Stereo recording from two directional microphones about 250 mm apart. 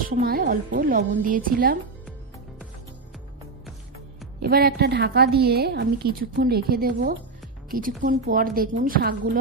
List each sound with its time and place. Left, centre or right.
0.0 s a woman's voice: right
4.4 s a woman's voice: right